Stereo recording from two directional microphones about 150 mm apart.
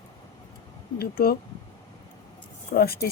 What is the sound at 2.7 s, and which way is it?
Speech, 90° left.